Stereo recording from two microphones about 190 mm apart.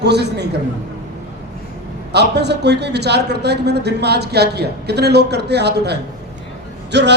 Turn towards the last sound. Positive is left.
turn(degrees=-65)  # may be behind; listen again after turning